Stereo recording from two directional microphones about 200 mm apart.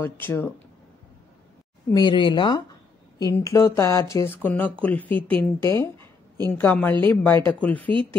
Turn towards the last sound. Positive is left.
turn(degrees=10)  # may be behind; listen again after turning